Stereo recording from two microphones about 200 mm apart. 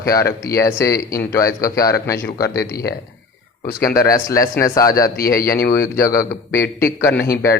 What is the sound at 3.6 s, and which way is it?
Speech, 45° left (ahead or behind).